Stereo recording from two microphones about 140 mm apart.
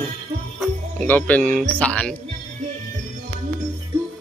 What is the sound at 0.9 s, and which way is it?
Speech, 10° left (ahead or behind).